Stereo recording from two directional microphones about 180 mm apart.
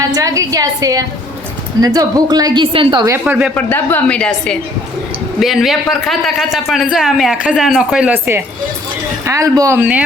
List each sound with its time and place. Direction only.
0.1 s a woman's voice: 20° right (ahead or behind)
3.2 s speech: 10° right (ahead or behind)
3.5 s a woman's voice: 10° left (ahead or behind); by 9.8 s 15° right (ahead or behind)